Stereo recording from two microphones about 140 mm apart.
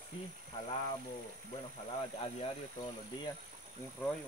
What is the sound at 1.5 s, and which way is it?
Speech, 40° left (ahead or behind).